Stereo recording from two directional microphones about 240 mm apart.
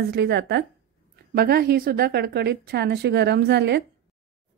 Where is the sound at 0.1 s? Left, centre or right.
Right.